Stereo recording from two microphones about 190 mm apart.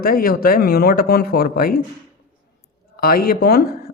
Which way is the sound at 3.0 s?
50° left (ahead or behind).